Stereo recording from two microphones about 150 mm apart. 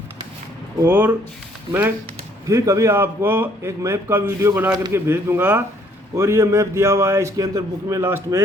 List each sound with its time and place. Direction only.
0.8 s a man's voice: 10° right (ahead or behind)
2.5 s a man's voice: 20° right (ahead or behind)